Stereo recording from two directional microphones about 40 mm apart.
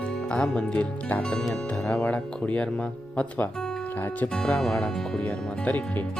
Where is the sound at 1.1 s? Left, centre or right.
Left.